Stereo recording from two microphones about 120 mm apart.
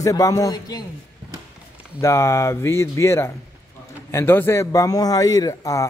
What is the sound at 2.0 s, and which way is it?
A man's voice, 25° left (ahead or behind).